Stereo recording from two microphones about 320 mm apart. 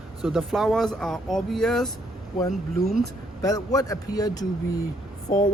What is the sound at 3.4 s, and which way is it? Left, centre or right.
A man's voice, centre.